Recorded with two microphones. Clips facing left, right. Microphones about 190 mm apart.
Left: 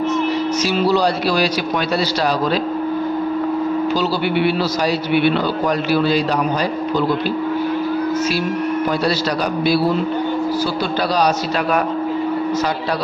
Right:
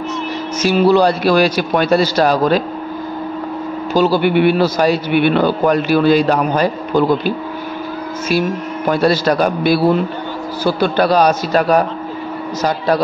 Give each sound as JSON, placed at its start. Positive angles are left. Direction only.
{"t": 0.7, "sound": "a man's voice", "side_deg": -55}
{"t": 3.9, "sound": "a man's voice", "side_deg": -50}
{"t": 9.0, "sound": "a man's voice", "side_deg": -50}